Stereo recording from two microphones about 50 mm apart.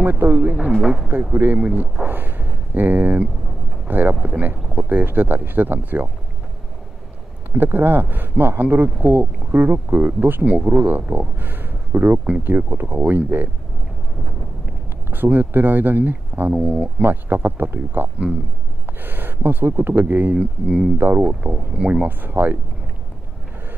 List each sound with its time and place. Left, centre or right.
0.0 s speech: right
1.6 s speech: right
2.0 s speech: right
7.5 s speech: right
10.4 s speech: right
15.0 s speech: right
16.6 s speech: right
17.0 s speech: right
20.3 s speech: centre
22.0 s speech: right